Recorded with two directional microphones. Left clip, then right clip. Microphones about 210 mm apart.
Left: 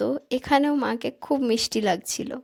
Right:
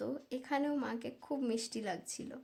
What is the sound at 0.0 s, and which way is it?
A woman's voice, 40° left (ahead or behind).